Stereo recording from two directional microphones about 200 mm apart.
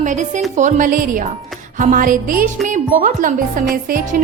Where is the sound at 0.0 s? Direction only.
40° right (ahead or behind).